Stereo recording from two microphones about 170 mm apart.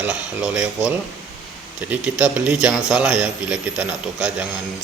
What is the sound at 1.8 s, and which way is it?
A man's voice, 10° right (ahead or behind).